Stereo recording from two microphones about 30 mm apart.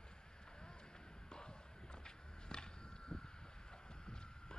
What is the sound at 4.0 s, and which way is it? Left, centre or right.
Clip-clop, left.